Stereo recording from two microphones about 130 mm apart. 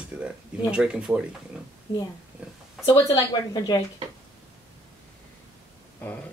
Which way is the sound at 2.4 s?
10° right (ahead or behind).